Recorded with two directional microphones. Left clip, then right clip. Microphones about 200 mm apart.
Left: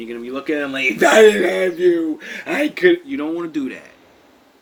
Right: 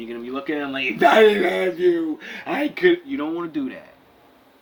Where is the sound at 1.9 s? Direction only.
15° right (ahead or behind).